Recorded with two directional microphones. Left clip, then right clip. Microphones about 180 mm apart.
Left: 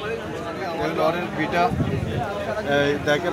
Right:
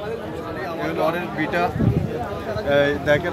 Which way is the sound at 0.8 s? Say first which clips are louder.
Even; 10° right (ahead or behind).